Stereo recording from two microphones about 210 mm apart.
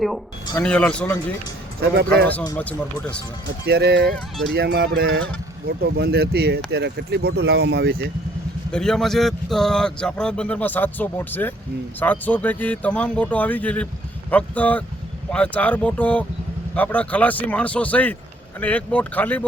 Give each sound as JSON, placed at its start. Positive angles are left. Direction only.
{"t": 0.6, "sound": "speech", "side_deg": 5}
{"t": 2.6, "sound": "speech", "side_deg": 5}
{"t": 3.4, "sound": "speech", "side_deg": -50}
{"t": 4.1, "sound": "speech", "side_deg": 0}
{"t": 4.5, "sound": "speech", "side_deg": -50}
{"t": 8.7, "sound": "speech", "side_deg": 0}